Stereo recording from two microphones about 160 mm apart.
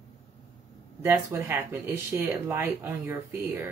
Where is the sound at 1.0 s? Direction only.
15° right (ahead or behind).